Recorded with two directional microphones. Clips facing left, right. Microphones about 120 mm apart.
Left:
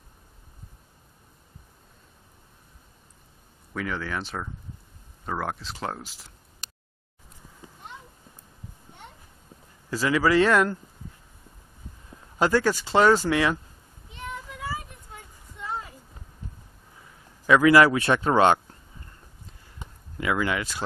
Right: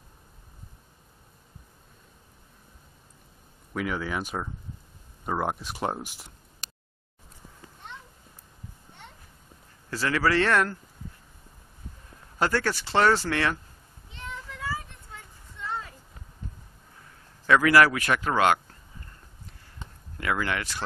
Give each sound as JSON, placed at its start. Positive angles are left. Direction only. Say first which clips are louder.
{"t": 3.7, "sound": "speech", "louder": "right 1 dB", "side_deg": -10}
{"t": 9.8, "sound": "speech", "louder": "left 3 dB", "side_deg": 15}
{"t": 12.4, "sound": "speech", "louder": "left 4 dB", "side_deg": 15}
{"t": 14.1, "sound": "child singing", "louder": "left 3 dB", "side_deg": 15}
{"t": 17.5, "sound": "speech", "louder": "left 3 dB", "side_deg": 20}
{"t": 19.8, "sound": "a sound", "louder": "left 4 dB", "side_deg": 15}